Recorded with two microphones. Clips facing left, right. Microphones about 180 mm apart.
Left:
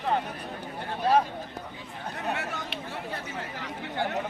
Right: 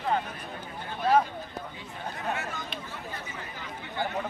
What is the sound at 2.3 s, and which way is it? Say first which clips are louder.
Chatter: left 1 dB; 75° left (ahead or behind).